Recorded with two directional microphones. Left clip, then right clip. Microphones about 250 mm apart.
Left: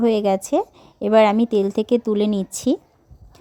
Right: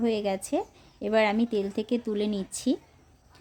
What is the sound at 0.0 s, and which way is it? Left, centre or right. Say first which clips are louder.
A woman's voice: left 9 dB; left.